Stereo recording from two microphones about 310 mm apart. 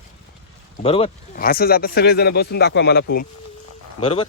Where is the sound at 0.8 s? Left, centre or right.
Centre.